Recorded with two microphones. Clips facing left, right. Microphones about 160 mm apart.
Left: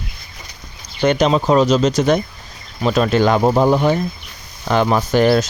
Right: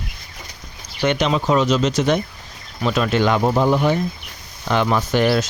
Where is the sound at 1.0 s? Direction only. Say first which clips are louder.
Left 4 dB; 40° left (ahead or behind).